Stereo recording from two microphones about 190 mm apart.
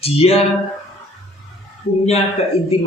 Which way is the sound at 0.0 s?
30° left (ahead or behind).